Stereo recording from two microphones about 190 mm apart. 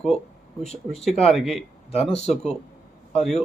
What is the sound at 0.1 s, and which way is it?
Speech, 35° left (ahead or behind).